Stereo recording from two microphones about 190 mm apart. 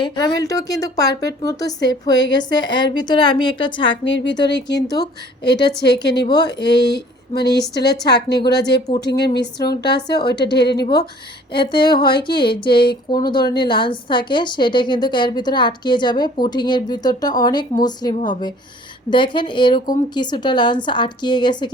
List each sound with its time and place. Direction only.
0.0 s a woman's voice: 20° left (ahead or behind)
3.8 s a woman's voice: 75° left (ahead or behind)
6.2 s a woman's voice: 20° left (ahead or behind)
6.5 s a woman's voice: 65° left (ahead or behind)
6.8 s a sound: 60° left (ahead or behind)
8.0 s a woman's voice: 60° left (ahead or behind)
11.5 s a woman's voice: 25° left (ahead or behind)